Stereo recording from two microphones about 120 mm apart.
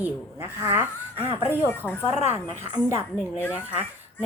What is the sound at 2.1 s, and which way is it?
Speech, 70° left (ahead or behind).